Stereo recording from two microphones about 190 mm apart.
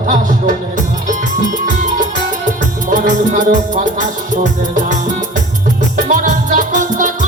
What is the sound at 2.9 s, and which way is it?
Music, 40° right (ahead or behind).